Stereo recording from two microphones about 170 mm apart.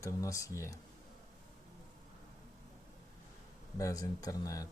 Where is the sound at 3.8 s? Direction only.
20° left (ahead or behind).